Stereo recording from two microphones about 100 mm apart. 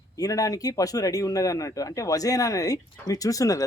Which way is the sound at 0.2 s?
35° left (ahead or behind).